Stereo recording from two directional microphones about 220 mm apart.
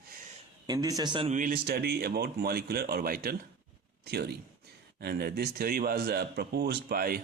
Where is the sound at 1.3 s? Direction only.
40° right (ahead or behind).